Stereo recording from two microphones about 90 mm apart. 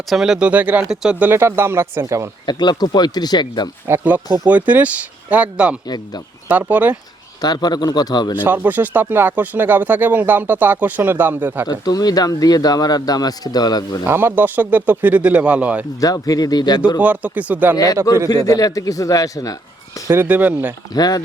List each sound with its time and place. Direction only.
0.1 s speech: 5° right (ahead or behind)
1.2 s speech: 25° right (ahead or behind)
2.5 s speech: 55° left (ahead or behind)
3.8 s speech: 25° right (ahead or behind)
7.4 s speech: 50° left (ahead or behind)
8.4 s speech: 20° right (ahead or behind)
11.7 s speech: 45° left (ahead or behind)
14.1 s speech: 25° right (ahead or behind)
16.0 s speech: 40° left (ahead or behind)
17.0 s speech: 15° right (ahead or behind)
18.3 s speech: 40° left (ahead or behind)
20.1 s speech: 15° right (ahead or behind)
20.9 s speech: 45° left (ahead or behind)